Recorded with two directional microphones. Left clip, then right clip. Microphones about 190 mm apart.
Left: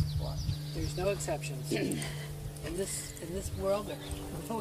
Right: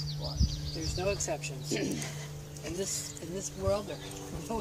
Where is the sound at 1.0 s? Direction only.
5° left (ahead or behind).